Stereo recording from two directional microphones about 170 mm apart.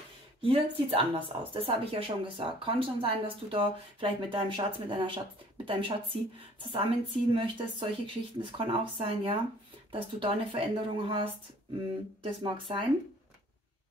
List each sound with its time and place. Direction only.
0.4 s speech: 30° right (ahead or behind)